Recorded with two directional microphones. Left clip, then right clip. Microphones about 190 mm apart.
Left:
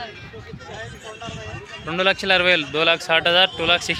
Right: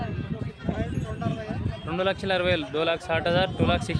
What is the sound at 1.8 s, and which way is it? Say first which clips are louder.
Speech: left 7 dB; 5° left (ahead or behind).